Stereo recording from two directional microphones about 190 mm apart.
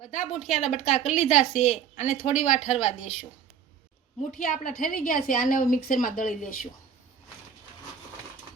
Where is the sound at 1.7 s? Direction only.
40° left (ahead or behind).